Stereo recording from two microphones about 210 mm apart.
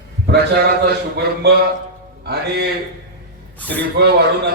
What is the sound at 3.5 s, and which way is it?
Speech, 5° left (ahead or behind).